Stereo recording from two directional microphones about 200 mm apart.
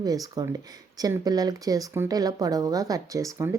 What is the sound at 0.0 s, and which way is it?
Speech, 20° right (ahead or behind).